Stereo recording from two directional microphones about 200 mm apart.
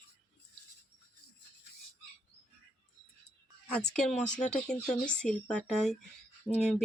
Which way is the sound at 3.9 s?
5° left (ahead or behind).